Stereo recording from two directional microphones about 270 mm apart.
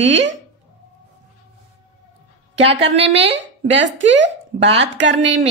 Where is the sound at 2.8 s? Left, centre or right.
Right.